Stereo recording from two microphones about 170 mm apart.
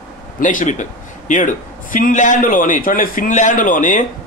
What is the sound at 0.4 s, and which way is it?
A man's voice, 50° left (ahead or behind).